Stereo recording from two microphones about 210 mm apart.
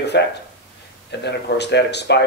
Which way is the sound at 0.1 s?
50° left (ahead or behind).